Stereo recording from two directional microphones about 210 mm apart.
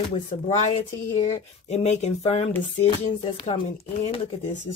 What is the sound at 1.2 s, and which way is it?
Speech, 30° left (ahead or behind).